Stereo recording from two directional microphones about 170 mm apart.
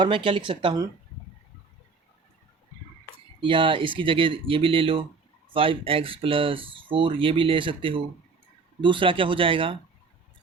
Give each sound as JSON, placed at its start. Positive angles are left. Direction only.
{"t": 0.0, "sound": "speech", "side_deg": -30}
{"t": 3.4, "sound": "speech", "side_deg": -30}